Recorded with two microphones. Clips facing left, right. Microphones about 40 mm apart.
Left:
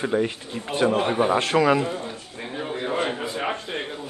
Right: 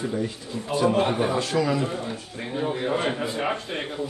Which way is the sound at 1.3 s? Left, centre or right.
Left.